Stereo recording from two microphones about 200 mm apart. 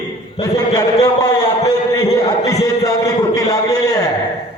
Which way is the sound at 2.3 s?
15° left (ahead or behind).